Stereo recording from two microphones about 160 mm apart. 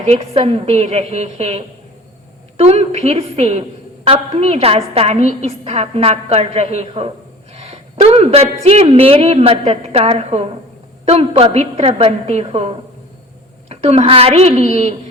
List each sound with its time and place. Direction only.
0.0 s a woman's voice: 40° right (ahead or behind)
7.5 s a sound: 40° right (ahead or behind)
7.9 s a woman's voice: 40° right (ahead or behind)